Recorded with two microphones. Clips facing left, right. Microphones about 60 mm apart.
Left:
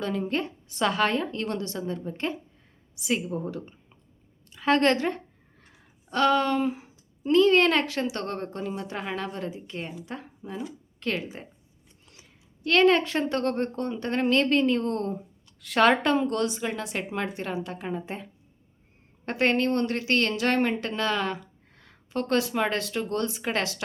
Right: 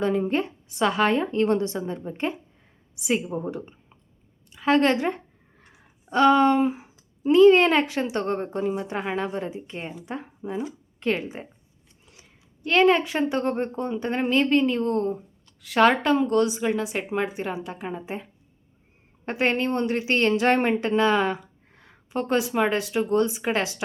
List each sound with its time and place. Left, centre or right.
0.0 s a woman's voice: right
1.2 s a woman's voice: right
4.5 s a woman's voice: centre
4.9 s a sound: centre
7.3 s a woman's voice: centre
12.1 s a sound: centre
12.6 s a woman's voice: centre